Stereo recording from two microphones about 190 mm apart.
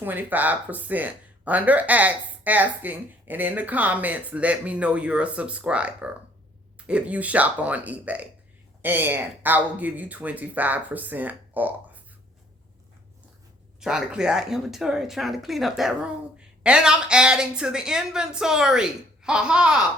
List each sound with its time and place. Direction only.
0.0 s speech: 10° right (ahead or behind)
13.7 s speech: 5° right (ahead or behind)